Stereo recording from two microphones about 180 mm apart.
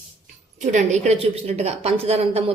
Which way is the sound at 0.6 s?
40° right (ahead or behind).